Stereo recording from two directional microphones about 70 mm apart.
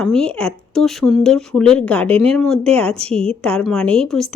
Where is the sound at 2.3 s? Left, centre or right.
Centre.